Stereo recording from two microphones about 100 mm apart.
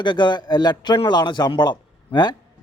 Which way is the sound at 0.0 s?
50° left (ahead or behind).